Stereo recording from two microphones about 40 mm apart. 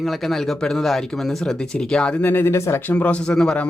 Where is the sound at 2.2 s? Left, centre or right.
Left.